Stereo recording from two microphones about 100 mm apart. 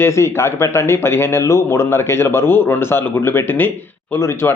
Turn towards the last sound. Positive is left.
turn(degrees=20)  # may be behind; listen again after turning